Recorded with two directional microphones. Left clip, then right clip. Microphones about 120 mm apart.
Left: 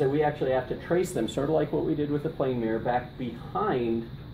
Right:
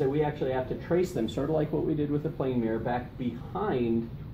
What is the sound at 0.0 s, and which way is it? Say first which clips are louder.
Speech: left 3 dB; 15° left (ahead or behind).